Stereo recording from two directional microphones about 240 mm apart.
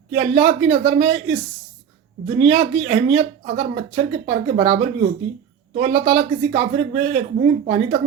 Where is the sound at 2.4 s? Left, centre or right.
Right.